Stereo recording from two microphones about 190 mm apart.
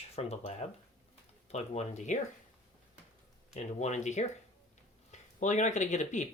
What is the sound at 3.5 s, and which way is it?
Speech, 40° left (ahead or behind).